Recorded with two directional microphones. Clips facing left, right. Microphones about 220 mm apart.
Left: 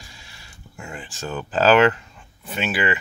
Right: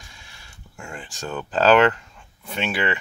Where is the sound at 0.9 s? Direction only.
5° left (ahead or behind).